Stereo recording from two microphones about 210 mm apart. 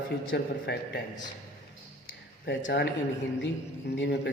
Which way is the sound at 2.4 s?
55° left (ahead or behind).